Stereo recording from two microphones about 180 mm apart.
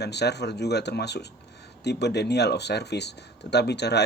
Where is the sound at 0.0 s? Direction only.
70° left (ahead or behind).